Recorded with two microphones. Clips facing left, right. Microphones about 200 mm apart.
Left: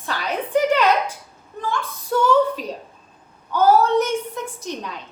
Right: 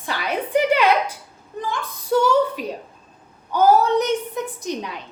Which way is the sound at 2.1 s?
15° right (ahead or behind).